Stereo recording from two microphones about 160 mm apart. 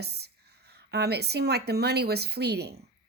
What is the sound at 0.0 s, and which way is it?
A woman's voice, 90° right.